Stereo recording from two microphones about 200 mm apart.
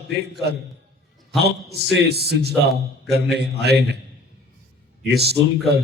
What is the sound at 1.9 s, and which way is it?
A man's voice, 55° right (ahead or behind).